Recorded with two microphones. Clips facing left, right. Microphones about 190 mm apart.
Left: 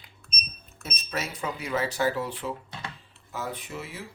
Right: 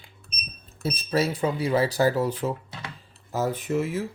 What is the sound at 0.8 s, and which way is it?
Speech, 35° right (ahead or behind).